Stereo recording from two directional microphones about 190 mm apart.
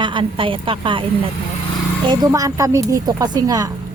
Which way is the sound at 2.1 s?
20° right (ahead or behind).